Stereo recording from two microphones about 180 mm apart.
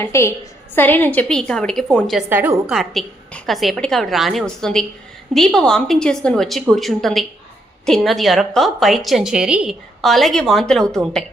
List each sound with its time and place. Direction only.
0.0 s a woman's voice: 15° left (ahead or behind)